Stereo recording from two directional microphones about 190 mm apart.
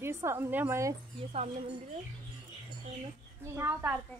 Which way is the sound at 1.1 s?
30° right (ahead or behind).